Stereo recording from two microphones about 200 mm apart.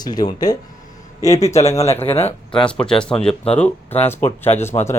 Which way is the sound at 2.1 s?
30° left (ahead or behind).